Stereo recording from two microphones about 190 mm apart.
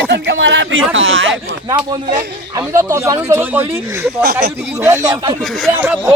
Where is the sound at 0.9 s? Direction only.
90° right.